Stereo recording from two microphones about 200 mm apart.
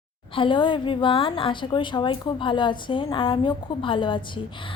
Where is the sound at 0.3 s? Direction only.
25° left (ahead or behind).